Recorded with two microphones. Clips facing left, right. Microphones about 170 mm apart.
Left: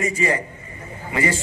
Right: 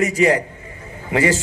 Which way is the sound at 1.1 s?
90° right.